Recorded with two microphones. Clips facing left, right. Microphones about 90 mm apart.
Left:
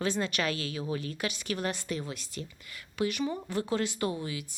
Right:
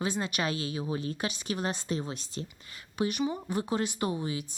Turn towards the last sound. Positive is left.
turn(degrees=-25)  # may be behind; listen again after turning